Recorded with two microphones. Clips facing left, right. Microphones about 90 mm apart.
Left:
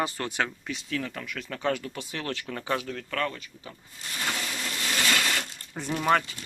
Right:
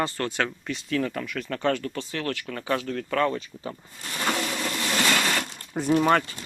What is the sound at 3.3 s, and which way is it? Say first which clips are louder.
Speech: right 10 dB; 35° right (ahead or behind).